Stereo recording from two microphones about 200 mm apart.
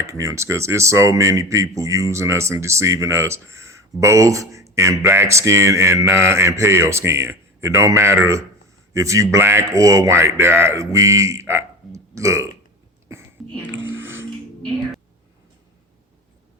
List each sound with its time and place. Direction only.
0.0 s speech: 15° right (ahead or behind)
13.7 s music: 75° right (ahead or behind)